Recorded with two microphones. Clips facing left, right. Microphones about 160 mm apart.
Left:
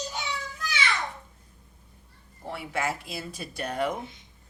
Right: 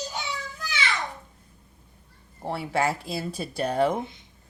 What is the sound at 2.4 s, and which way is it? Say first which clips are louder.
Speech: right 5 dB; 35° right (ahead or behind).